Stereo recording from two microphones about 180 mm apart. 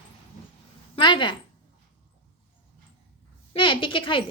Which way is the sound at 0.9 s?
25° left (ahead or behind).